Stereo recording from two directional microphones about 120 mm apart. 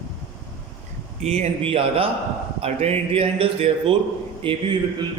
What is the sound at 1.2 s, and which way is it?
A man's voice, 65° right (ahead or behind).